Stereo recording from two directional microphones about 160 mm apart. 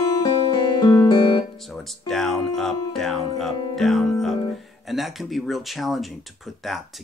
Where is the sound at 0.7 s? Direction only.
25° left (ahead or behind).